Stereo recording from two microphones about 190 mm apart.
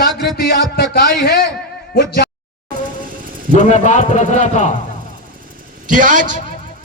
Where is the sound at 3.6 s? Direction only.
40° left (ahead or behind).